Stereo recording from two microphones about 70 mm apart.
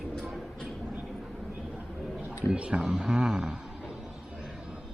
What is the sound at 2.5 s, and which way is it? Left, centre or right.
A man's voice, centre.